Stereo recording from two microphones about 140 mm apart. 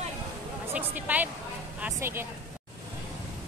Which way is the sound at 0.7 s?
10° right (ahead or behind).